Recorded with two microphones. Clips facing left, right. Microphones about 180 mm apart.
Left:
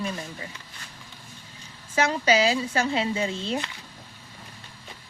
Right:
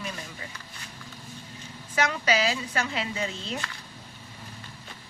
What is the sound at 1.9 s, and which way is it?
Speech, 30° left (ahead or behind).